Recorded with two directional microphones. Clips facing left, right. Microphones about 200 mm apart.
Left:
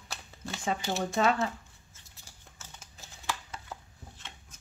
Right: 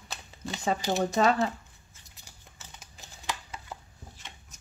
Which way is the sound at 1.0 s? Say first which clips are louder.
Right 3 dB; 40° right (ahead or behind).